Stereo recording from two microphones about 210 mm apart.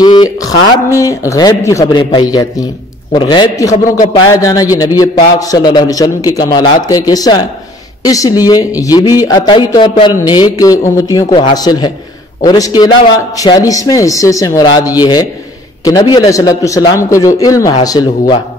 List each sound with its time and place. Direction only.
0.0 s speech: 20° left (ahead or behind)